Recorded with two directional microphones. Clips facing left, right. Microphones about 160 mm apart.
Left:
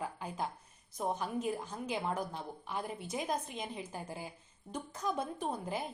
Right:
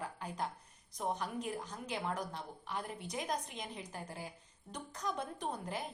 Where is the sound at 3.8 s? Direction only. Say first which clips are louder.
Left 3 dB; 15° left (ahead or behind).